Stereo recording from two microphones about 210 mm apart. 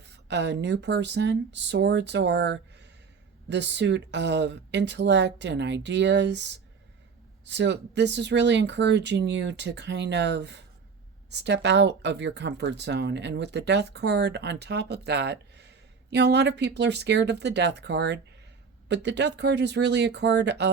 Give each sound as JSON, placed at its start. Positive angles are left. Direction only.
{"t": 0.0, "sound": "speech", "side_deg": -55}